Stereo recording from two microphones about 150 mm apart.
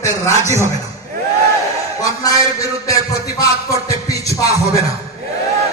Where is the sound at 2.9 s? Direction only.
20° left (ahead or behind).